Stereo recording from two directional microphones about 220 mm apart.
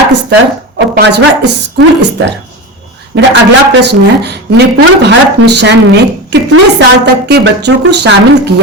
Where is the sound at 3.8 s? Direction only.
50° right (ahead or behind).